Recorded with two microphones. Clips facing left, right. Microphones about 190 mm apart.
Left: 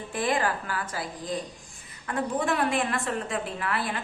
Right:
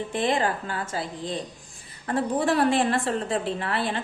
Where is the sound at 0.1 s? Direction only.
25° right (ahead or behind).